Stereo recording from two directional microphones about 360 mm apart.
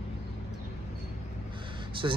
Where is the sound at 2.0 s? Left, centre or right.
Centre.